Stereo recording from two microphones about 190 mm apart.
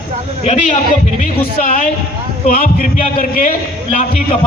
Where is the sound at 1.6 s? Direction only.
45° left (ahead or behind).